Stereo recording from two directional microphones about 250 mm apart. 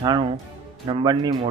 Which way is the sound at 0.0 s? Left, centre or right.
Centre.